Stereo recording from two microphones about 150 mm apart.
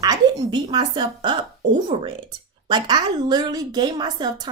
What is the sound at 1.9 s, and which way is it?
Speech, 45° right (ahead or behind).